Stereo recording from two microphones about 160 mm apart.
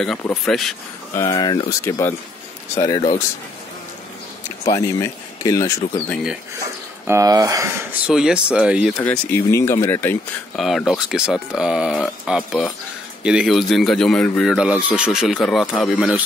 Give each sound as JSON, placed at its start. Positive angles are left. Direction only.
{"t": 0.3, "sound": "speech", "side_deg": 0}
{"t": 1.1, "sound": "speech", "side_deg": 25}
{"t": 4.7, "sound": "speech", "side_deg": 20}
{"t": 7.1, "sound": "speech", "side_deg": -20}
{"t": 8.1, "sound": "speech", "side_deg": -5}
{"t": 9.0, "sound": "speech", "side_deg": 15}
{"t": 10.5, "sound": "speech", "side_deg": 0}